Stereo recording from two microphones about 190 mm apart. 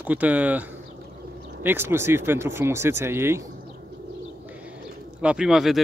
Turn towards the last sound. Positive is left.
turn(degrees=0)  # may be behind; listen again after turning